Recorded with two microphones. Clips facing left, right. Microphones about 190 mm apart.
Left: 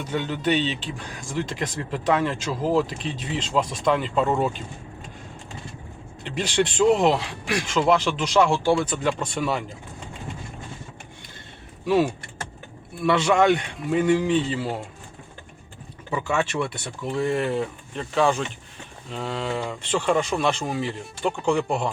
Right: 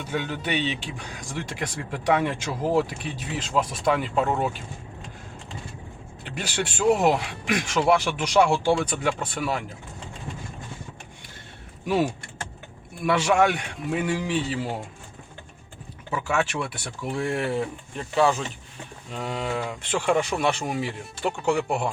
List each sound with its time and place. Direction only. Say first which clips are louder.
0.1 s speech: left 4 dB; 10° right (ahead or behind)
6.3 s speech: left 7 dB; 5° right (ahead or behind)
13.1 s speech: left 2 dB; 10° right (ahead or behind)
16.1 s speech: left 1 dB; 5° right (ahead or behind)